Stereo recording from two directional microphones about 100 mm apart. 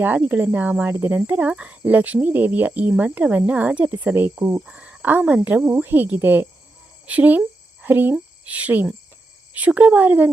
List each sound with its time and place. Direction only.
0.0 s speech: 15° right (ahead or behind)
4.6 s speech: 10° right (ahead or behind)